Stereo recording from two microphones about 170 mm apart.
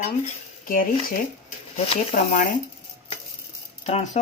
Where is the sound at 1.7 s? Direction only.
35° left (ahead or behind).